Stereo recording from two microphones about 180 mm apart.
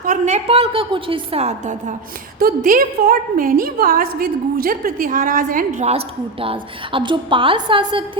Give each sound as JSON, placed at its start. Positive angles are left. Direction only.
{"t": 0.0, "sound": "a woman's voice", "side_deg": -45}
{"t": 2.4, "sound": "a woman's voice", "side_deg": -55}